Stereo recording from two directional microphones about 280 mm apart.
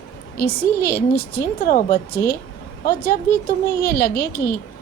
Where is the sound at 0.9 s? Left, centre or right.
Left.